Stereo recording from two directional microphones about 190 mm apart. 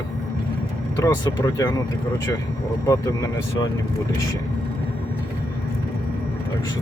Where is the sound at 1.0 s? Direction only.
20° left (ahead or behind).